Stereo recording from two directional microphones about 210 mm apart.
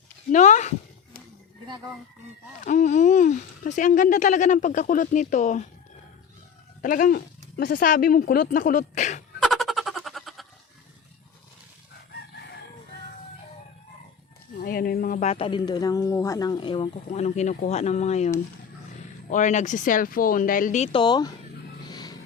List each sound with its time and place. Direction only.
0.3 s a sound: 35° left (ahead or behind)
2.6 s speech: 35° left (ahead or behind)
6.8 s speech: 40° left (ahead or behind)
9.4 s a sound: centre (ahead or behind)
14.6 s speech: 45° left (ahead or behind)
19.3 s speech: 35° left (ahead or behind); by 21.3 s 20° left (ahead or behind)
21.8 s vehicle: 20° left (ahead or behind)